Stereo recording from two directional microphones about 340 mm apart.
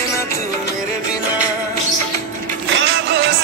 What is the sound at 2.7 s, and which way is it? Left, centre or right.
Music, right.